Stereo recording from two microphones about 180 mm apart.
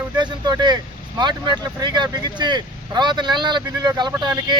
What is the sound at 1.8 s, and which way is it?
Speech, 25° right (ahead or behind).